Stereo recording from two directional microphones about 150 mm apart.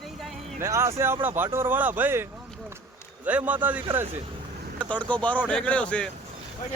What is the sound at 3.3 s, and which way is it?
Speech, 10° right (ahead or behind).